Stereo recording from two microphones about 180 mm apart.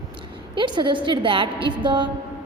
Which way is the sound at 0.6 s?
25° right (ahead or behind).